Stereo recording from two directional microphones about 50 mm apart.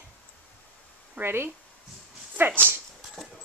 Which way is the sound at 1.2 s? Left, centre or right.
Right.